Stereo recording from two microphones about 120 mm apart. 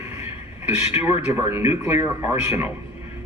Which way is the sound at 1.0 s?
10° right (ahead or behind).